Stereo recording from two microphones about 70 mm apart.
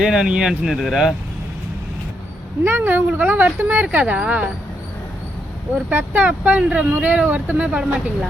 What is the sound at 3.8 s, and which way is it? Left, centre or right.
Speech, centre.